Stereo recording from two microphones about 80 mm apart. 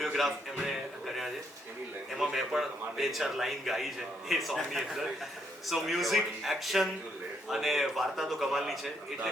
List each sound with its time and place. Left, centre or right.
0.0 s speech: centre
0.5 s a sound: centre
2.1 s a man's voice: centre